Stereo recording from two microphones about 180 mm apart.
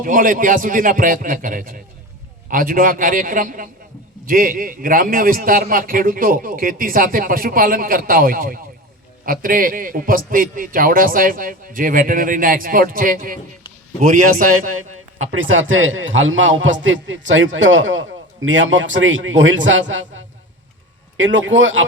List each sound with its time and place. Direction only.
0.0 s a man's voice: 50° right (ahead or behind)
15.3 s a man's voice: 90° right